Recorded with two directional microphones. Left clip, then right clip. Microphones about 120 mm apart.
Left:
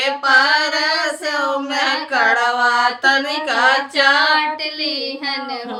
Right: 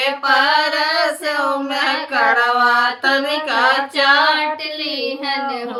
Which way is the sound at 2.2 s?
20° left (ahead or behind).